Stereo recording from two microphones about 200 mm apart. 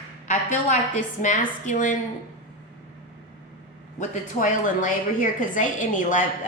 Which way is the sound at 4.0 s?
40° left (ahead or behind).